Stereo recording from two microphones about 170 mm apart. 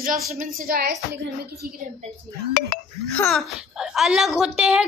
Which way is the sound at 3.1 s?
10° left (ahead or behind).